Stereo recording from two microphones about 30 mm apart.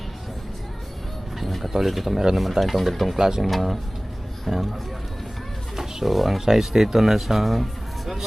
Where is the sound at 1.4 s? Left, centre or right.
Centre.